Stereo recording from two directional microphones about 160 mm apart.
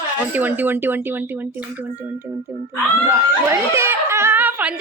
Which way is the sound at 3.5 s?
15° right (ahead or behind).